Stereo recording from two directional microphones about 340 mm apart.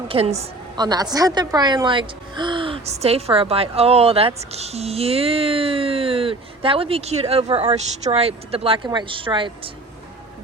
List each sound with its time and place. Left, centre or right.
0.1 s a woman's voice: centre